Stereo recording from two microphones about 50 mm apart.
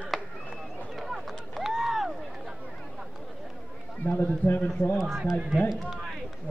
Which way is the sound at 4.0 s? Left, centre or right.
Left.